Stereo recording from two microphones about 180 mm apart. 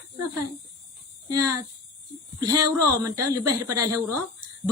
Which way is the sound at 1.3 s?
20° right (ahead or behind).